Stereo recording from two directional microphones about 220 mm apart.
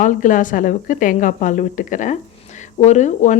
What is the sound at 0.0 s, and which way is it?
Speech, 35° left (ahead or behind).